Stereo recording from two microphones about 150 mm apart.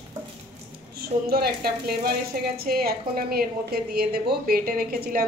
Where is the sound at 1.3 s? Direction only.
90° right.